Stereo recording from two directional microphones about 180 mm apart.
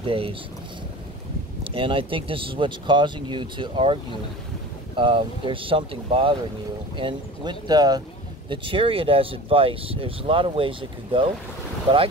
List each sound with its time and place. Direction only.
0.0 s speech: 30° right (ahead or behind)
1.6 s speech: 30° right (ahead or behind)